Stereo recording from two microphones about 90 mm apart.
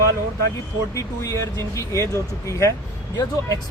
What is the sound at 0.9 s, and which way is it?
Speech, 35° left (ahead or behind).